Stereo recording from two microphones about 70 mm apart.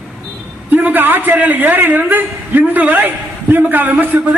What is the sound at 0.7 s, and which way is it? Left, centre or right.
A man's voice, right.